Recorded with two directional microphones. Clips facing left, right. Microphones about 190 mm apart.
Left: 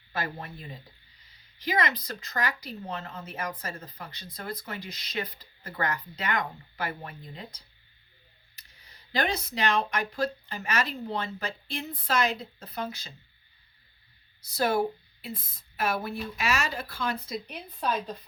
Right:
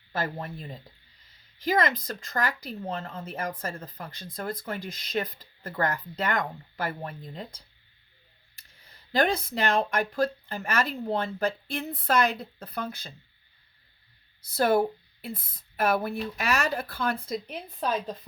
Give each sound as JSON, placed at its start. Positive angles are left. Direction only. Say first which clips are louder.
{"t": 1.5, "sound": "speech", "louder": "right 3 dB", "side_deg": -50}
{"t": 3.0, "sound": "a woman's voice", "louder": "right 3 dB", "side_deg": -30}
{"t": 3.2, "sound": "speech", "louder": "right 3 dB", "side_deg": -50}
{"t": 8.5, "sound": "speech", "louder": "right 1 dB", "side_deg": -50}
{"t": 14.4, "sound": "speech", "louder": "right 3 dB", "side_deg": -55}